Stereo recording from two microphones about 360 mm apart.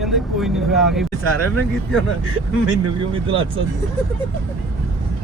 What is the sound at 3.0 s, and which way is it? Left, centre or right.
Speech, centre.